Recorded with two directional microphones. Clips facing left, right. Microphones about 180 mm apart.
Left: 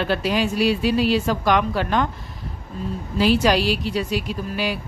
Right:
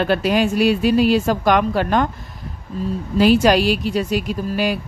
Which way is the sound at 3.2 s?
50° right (ahead or behind).